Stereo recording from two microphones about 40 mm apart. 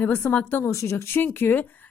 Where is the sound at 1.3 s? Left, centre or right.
Left.